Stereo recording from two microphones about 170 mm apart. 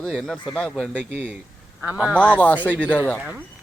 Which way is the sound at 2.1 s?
10° left (ahead or behind).